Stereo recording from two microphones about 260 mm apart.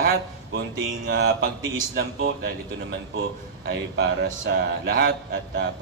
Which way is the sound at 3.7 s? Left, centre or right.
Right.